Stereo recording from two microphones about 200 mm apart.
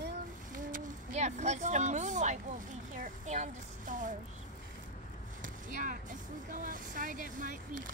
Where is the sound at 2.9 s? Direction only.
40° right (ahead or behind).